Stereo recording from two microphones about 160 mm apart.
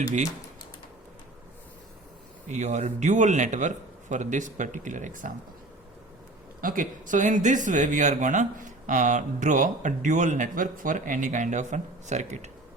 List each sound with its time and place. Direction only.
2.5 s speech: 45° right (ahead or behind)
6.6 s speech: 60° right (ahead or behind)